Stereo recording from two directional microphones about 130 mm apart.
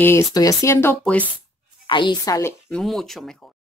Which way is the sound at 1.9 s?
35° left (ahead or behind).